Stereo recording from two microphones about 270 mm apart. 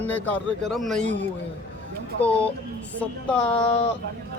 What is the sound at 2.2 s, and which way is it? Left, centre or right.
Speech, centre.